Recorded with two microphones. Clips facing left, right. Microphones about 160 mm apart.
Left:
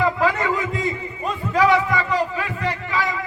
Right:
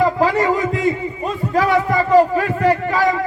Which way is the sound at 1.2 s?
45° right (ahead or behind).